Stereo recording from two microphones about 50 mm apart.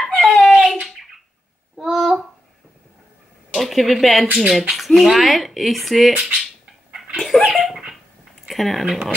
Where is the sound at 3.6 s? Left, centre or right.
Centre.